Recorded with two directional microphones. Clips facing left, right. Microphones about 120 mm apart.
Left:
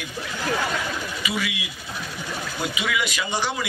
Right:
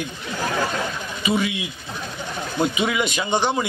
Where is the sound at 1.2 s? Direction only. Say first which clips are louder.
Right 8 dB; 25° right (ahead or behind).